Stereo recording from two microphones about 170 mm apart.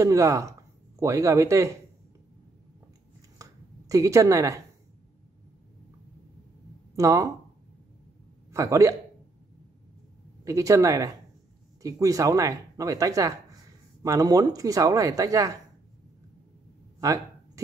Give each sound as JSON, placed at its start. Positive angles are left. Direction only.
{"t": 0.0, "sound": "speech", "side_deg": -20}
{"t": 3.9, "sound": "speech", "side_deg": -20}
{"t": 7.0, "sound": "speech", "side_deg": -20}
{"t": 8.5, "sound": "speech", "side_deg": -20}
{"t": 10.4, "sound": "speech", "side_deg": -20}